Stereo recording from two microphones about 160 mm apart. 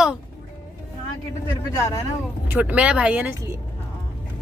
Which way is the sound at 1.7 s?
20° left (ahead or behind).